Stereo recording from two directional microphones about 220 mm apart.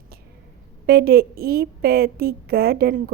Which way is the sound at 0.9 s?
45° right (ahead or behind).